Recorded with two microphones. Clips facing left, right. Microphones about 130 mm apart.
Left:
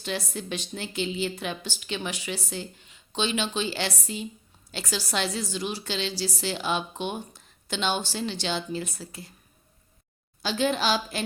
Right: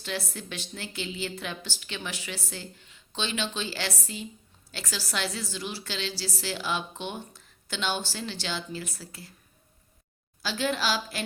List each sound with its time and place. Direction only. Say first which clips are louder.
0.0 s a woman's voice: left 3 dB; 20° left (ahead or behind)
10.4 s a woman's voice: left 3 dB; 20° left (ahead or behind)